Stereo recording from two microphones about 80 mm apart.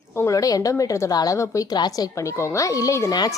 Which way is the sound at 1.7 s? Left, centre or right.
Left.